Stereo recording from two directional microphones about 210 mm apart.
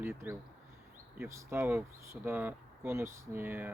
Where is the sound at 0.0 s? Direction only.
10° right (ahead or behind).